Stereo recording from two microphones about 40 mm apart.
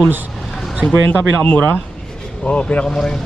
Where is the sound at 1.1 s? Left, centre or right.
Left.